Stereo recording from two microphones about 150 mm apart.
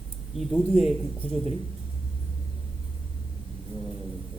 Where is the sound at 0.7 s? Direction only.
50° left (ahead or behind).